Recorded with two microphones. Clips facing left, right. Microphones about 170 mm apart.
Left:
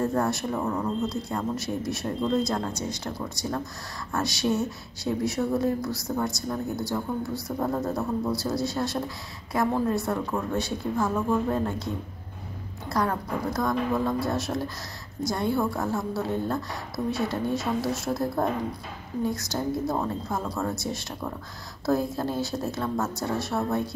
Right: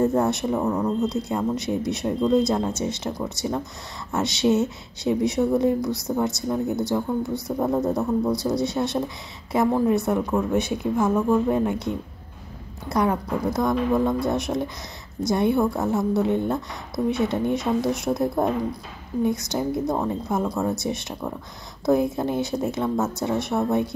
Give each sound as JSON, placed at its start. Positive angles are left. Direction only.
{"t": 0.0, "sound": "a woman's voice", "side_deg": -20}
{"t": 12.9, "sound": "a woman's voice", "side_deg": -15}